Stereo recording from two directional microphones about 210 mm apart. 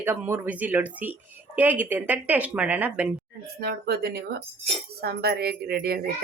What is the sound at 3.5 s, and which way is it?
Speech, 50° right (ahead or behind).